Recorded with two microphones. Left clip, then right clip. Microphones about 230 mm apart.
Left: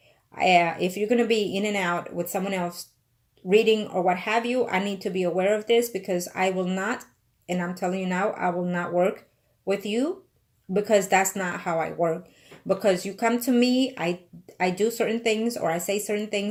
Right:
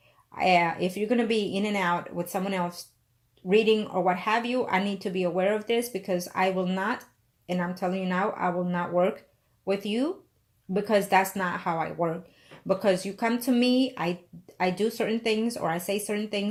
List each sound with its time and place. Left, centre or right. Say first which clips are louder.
0.3 s speech: left 3 dB; centre